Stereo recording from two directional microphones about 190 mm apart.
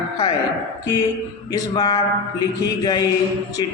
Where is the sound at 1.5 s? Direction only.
20° left (ahead or behind).